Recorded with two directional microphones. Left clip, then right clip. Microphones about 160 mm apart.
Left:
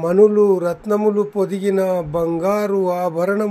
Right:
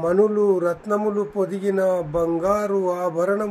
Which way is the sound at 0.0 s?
50° left (ahead or behind).